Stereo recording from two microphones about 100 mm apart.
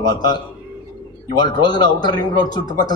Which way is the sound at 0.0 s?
45° left (ahead or behind).